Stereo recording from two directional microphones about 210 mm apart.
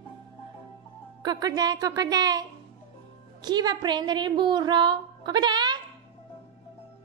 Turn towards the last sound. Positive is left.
turn(degrees=-20)  # may be behind; listen again after turning